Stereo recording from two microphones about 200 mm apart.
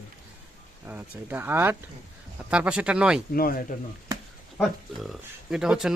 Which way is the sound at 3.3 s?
45° left (ahead or behind).